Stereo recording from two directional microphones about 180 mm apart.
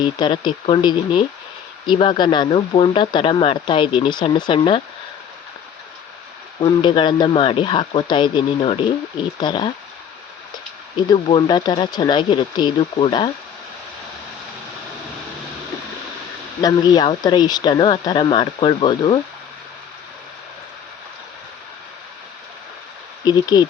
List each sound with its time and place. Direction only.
0.0 s speech: 25° left (ahead or behind)
6.6 s speech: 25° left (ahead or behind)
11.1 s speech: 25° left (ahead or behind)
16.6 s speech: 20° left (ahead or behind)
23.2 s speech: 25° left (ahead or behind)